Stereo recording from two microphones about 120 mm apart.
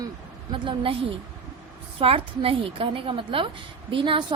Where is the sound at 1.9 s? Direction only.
50° right (ahead or behind).